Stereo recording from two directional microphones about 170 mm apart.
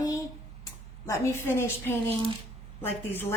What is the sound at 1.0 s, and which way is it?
A woman's voice, 15° left (ahead or behind).